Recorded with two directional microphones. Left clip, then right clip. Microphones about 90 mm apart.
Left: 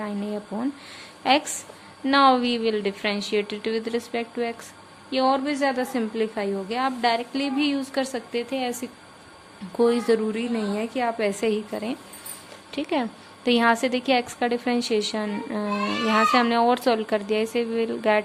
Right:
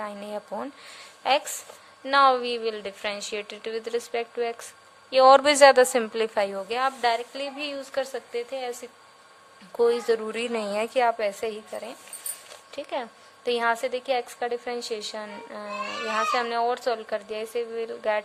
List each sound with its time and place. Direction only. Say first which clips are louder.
0.0 s speech: left 2 dB; 65° right (ahead or behind)
1.2 s a woman's voice: left 3 dB; 45° right (ahead or behind)
6.1 s a woman's voice: right 1 dB; 90° right; by 8.9 s 25° right (ahead or behind)
9.7 s a woman's voice: left 2 dB; 45° right (ahead or behind)
10.3 s a woman's voice: right 1 dB; 70° right (ahead or behind)
11.2 s a woman's voice: left 4 dB; 35° right (ahead or behind)